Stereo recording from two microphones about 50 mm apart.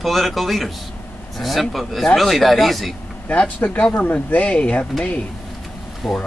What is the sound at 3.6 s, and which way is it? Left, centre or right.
Speech, left.